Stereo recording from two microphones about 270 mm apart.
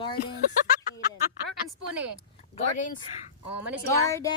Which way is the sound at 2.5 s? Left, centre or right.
Left.